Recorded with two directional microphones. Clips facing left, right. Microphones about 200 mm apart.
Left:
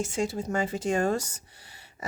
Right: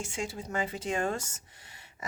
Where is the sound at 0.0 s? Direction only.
40° left (ahead or behind).